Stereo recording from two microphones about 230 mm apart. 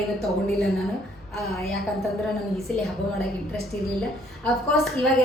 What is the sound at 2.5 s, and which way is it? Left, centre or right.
A woman's voice, centre.